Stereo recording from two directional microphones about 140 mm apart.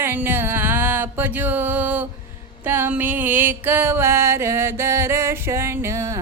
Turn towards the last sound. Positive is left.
turn(degrees=-20)  # may be behind; listen again after turning